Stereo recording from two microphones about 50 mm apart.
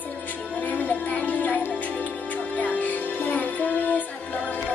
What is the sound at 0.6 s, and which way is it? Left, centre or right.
Music, left.